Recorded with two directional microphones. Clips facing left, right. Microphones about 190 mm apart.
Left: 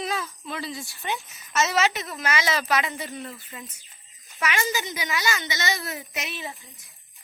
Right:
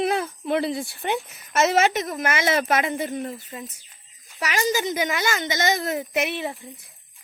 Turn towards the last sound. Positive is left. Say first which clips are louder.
# right 9 dB
turn(degrees=-60)  # may be behind; listen again after turning